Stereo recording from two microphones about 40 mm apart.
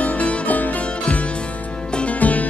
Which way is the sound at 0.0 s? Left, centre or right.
Left.